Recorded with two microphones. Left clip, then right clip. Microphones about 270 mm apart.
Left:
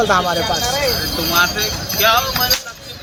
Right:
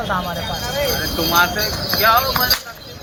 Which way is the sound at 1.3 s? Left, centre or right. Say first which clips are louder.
Even; centre.